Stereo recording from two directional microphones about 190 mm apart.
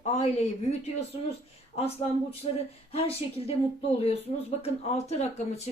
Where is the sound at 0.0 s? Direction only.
35° left (ahead or behind).